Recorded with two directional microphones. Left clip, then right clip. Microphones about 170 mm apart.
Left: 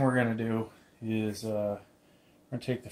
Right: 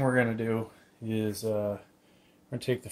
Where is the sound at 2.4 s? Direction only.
65° right (ahead or behind).